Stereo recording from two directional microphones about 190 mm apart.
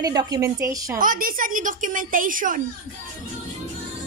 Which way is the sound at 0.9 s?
45° right (ahead or behind).